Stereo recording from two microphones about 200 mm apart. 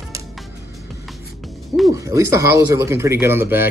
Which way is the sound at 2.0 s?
15° right (ahead or behind).